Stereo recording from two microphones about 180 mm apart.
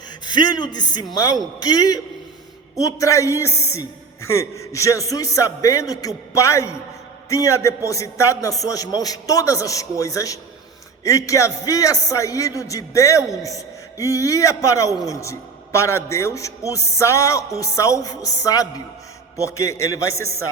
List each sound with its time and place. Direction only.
0.3 s a man's voice: 25° left (ahead or behind)